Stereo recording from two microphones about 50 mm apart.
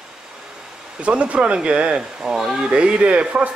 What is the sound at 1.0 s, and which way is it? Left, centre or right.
Speech, right.